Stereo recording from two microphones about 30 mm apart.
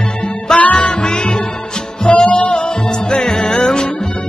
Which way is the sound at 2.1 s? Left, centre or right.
Left.